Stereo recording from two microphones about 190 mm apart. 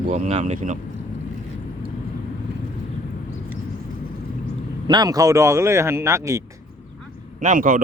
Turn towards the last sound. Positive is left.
turn(degrees=-45)  # may be behind; listen again after turning